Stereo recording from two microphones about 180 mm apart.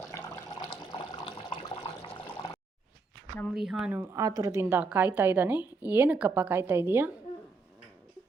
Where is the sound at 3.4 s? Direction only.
Centre (ahead or behind).